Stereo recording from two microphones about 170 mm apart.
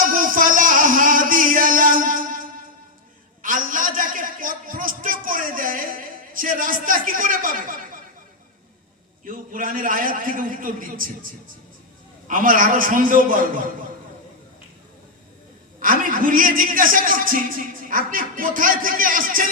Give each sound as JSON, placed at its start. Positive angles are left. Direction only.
{"t": 0.1, "sound": "music", "side_deg": -55}
{"t": 3.4, "sound": "a sound", "side_deg": -50}
{"t": 9.2, "sound": "a man's voice", "side_deg": -50}
{"t": 12.3, "sound": "a man's voice", "side_deg": -55}
{"t": 15.8, "sound": "a man's voice", "side_deg": -55}